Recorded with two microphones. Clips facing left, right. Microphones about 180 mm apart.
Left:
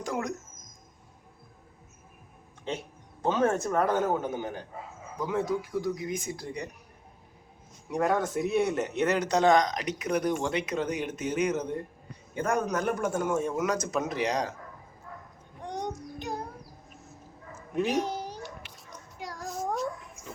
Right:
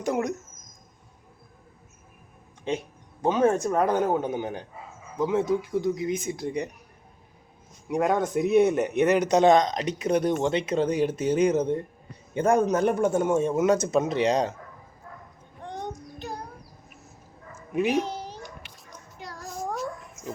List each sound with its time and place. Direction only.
0.0 s speech: 20° right (ahead or behind)
2.6 s speech: 15° right (ahead or behind)
7.9 s speech: 15° right (ahead or behind)
15.6 s child singing: 15° left (ahead or behind)
17.7 s speech: 10° right (ahead or behind)
18.0 s cat: 15° left (ahead or behind)
19.2 s child singing: 15° left (ahead or behind)
19.5 s child singing: centre (ahead or behind)